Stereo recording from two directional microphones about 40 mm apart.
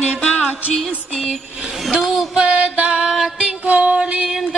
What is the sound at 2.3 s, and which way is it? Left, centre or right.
Music, right.